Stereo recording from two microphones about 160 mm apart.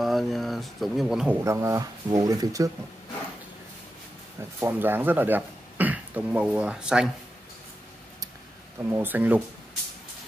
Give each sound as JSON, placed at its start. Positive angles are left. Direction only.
{"t": 0.0, "sound": "speech", "side_deg": 0}
{"t": 1.4, "sound": "speech", "side_deg": -20}
{"t": 4.6, "sound": "speech", "side_deg": -15}
{"t": 8.8, "sound": "speech", "side_deg": -15}